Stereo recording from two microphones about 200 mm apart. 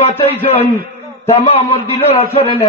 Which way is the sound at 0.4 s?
30° left (ahead or behind).